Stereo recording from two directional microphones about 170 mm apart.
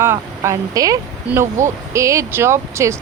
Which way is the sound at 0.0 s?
15° right (ahead or behind).